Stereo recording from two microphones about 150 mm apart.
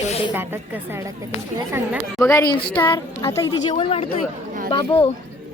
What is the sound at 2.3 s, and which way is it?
A woman's voice, 20° left (ahead or behind).